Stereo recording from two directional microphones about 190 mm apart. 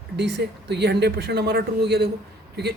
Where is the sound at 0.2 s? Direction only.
65° right (ahead or behind).